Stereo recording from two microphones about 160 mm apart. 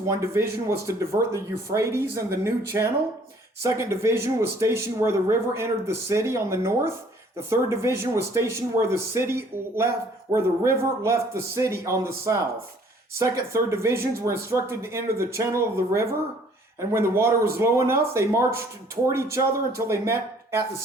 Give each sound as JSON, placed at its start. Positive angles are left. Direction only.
{"t": 0.1, "sound": "speech", "side_deg": -15}